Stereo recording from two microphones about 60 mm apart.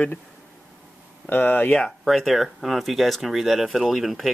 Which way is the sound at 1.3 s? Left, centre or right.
Left.